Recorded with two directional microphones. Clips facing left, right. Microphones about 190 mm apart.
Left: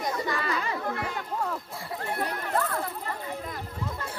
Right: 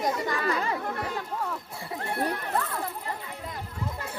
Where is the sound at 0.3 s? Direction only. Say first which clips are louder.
Right 2 dB; 35° right (ahead or behind).